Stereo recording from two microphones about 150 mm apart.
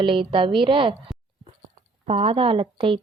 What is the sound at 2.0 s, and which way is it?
Speech, 45° right (ahead or behind).